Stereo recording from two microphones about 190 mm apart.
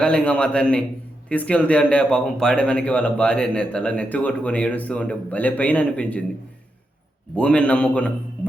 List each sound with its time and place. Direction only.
0.0 s a man's voice: 5° left (ahead or behind)
7.3 s a man's voice: 5° left (ahead or behind)